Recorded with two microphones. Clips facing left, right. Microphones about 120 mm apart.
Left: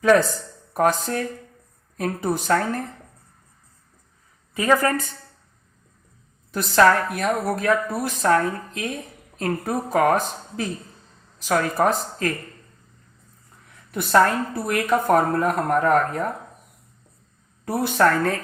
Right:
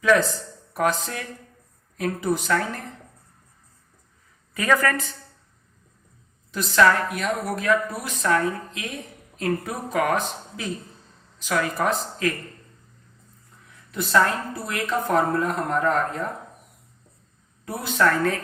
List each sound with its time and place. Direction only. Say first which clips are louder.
0.0 s a woman's voice: left 3 dB; 40° left (ahead or behind)
4.5 s a woman's voice: left 2 dB; 25° left (ahead or behind)
6.6 s a woman's voice: left 2 dB; 40° left (ahead or behind)
13.9 s speech: left 3 dB; 45° left (ahead or behind)
17.7 s speech: left 3 dB; 50° left (ahead or behind)